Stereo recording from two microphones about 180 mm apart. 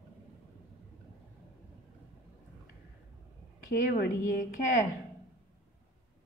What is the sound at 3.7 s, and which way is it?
Speech, 55° left (ahead or behind).